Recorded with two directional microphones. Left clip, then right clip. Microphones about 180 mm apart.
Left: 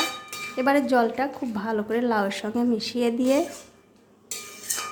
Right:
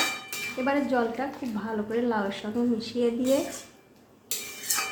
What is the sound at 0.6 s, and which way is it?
A woman's voice, 40° left (ahead or behind).